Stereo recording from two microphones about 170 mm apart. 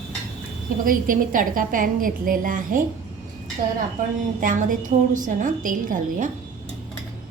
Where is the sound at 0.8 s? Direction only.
55° right (ahead or behind).